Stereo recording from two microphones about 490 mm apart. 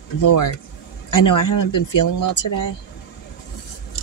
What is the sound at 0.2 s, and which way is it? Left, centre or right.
Speech, left.